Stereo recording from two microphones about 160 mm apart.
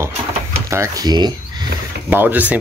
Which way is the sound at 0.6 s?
20° right (ahead or behind).